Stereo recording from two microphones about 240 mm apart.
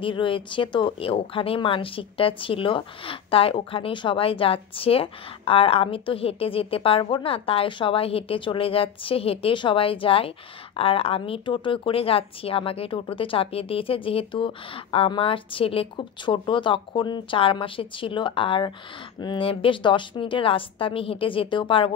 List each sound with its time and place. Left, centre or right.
0.0 s speech: left